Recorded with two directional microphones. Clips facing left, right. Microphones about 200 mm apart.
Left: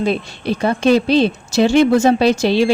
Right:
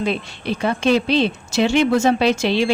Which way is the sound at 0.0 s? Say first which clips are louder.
Left 4 dB; 40° left (ahead or behind).